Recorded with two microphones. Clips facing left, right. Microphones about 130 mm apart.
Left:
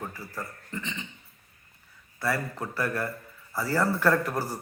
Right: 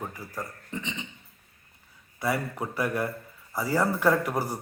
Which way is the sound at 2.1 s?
20° right (ahead or behind).